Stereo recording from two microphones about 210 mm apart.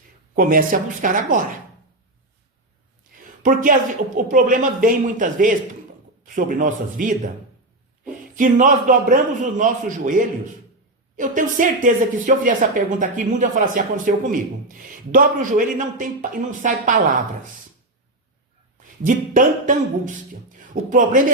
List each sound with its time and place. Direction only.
0.3 s a man's voice: 40° right (ahead or behind)
3.0 s a sound: 40° right (ahead or behind)
4.3 s a man's voice: 40° right (ahead or behind)
19.0 s a man's voice: 40° right (ahead or behind)